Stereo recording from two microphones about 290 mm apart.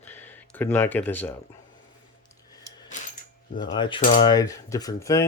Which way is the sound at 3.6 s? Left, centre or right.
Centre.